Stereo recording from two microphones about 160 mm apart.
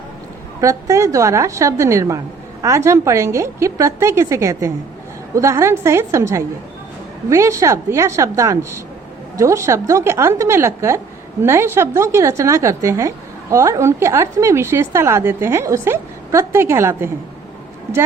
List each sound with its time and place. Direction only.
0.6 s a woman's voice: 20° right (ahead or behind)